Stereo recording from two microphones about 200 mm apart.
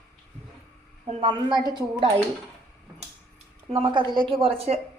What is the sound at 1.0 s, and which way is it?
Speech, 25° right (ahead or behind).